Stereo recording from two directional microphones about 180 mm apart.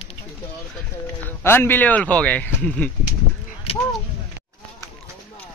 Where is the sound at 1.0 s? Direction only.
10° left (ahead or behind).